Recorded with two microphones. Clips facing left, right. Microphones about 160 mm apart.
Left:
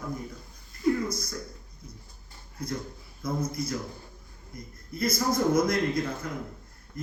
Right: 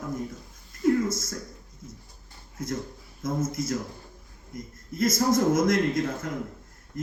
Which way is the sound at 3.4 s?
90° right.